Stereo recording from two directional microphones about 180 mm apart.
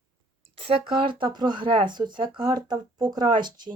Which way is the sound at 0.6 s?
30° right (ahead or behind).